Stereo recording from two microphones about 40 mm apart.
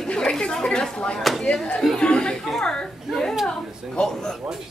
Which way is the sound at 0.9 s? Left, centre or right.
Centre.